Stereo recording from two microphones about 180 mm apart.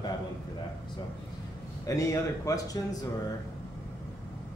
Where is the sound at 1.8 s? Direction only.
15° left (ahead or behind).